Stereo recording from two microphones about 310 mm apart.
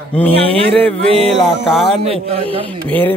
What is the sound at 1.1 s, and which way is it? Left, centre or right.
Speech, centre.